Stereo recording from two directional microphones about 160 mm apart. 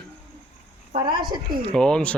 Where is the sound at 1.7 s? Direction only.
5° left (ahead or behind).